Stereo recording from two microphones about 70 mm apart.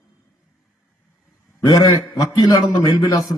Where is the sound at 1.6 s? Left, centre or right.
Left.